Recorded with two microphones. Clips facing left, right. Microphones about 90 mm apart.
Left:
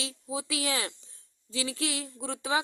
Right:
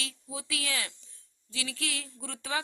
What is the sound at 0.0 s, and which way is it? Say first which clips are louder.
Speech: left 5 dB; 25° left (ahead or behind).